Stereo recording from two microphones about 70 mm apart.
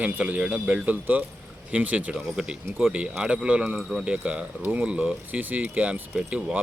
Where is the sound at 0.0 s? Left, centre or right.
Right.